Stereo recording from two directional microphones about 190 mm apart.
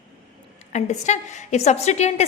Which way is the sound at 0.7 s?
40° left (ahead or behind).